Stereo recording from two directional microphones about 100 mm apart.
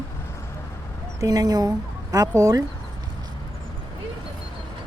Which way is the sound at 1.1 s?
35° right (ahead or behind).